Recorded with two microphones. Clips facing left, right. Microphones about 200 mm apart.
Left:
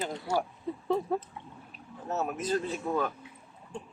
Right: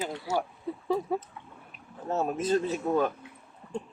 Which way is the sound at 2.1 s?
30° right (ahead or behind).